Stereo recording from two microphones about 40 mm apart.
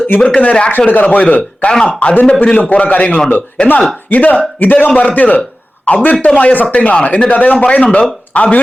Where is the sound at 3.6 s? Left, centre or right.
Left.